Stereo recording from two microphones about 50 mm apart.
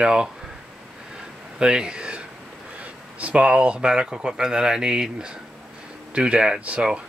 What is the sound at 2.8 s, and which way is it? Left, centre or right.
Speech, right.